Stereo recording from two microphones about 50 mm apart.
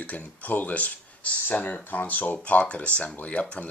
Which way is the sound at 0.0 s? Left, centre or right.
Left.